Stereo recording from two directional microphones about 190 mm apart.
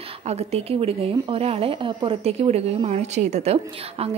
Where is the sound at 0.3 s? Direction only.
35° right (ahead or behind).